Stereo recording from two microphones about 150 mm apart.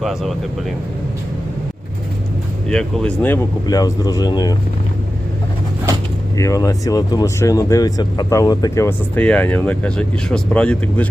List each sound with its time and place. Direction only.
0.0 s speech: centre (ahead or behind)
2.6 s speech: 5° left (ahead or behind)
3.7 s speech: 25° left (ahead or behind)
6.3 s speech: 20° left (ahead or behind)